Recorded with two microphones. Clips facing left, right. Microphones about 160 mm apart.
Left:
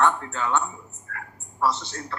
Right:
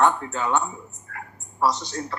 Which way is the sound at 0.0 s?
20° right (ahead or behind).